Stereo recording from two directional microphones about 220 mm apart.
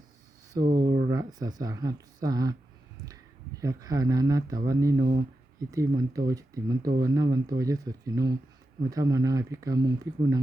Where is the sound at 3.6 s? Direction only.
15° right (ahead or behind).